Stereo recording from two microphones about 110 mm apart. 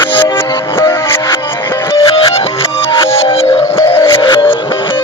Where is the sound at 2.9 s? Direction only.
55° left (ahead or behind).